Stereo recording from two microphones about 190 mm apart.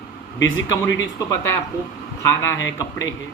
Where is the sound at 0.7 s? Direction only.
15° left (ahead or behind).